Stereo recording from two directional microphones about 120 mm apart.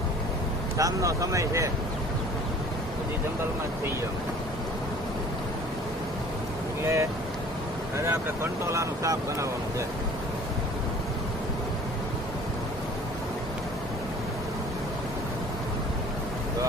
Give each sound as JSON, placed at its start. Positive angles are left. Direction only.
{"t": 0.8, "sound": "speech", "side_deg": -25}
{"t": 6.8, "sound": "speech", "side_deg": -25}